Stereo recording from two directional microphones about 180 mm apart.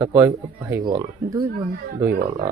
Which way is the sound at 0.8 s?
25° right (ahead or behind).